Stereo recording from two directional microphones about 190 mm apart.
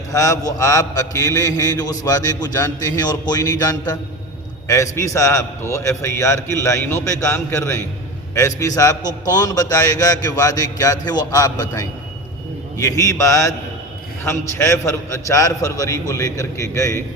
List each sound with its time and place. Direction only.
0.1 s a man's voice: 15° left (ahead or behind)